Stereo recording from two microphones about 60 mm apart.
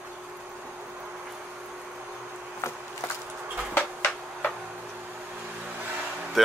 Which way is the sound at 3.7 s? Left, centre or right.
Left.